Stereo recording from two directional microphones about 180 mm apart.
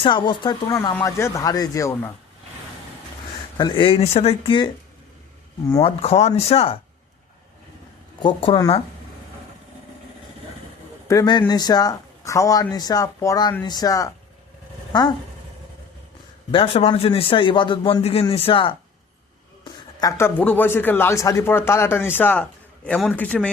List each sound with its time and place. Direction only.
0.0 s speech: 25° left (ahead or behind)
3.6 s speech: 25° left (ahead or behind)
5.8 s a man's voice: 35° left (ahead or behind)
8.2 s speech: 25° left (ahead or behind)
11.1 s speech: 20° left (ahead or behind)
16.5 s a man's voice: 30° left (ahead or behind)
20.0 s a man's voice: 15° left (ahead or behind)